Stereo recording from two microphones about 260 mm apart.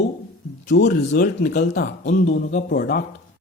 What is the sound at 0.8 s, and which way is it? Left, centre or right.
Speech, left.